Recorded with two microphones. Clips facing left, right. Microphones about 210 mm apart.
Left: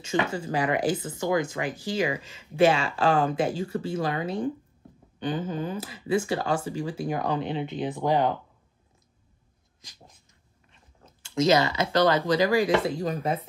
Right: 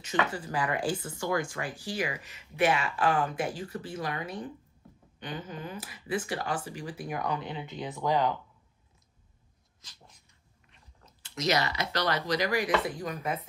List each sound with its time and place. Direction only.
0.0 s speech: 25° left (ahead or behind)
11.2 s speech: 25° left (ahead or behind)